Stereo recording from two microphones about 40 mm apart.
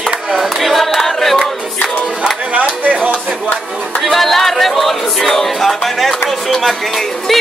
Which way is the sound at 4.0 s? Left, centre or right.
Centre.